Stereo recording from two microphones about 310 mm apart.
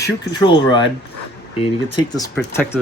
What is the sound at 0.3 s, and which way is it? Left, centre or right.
Speech, centre.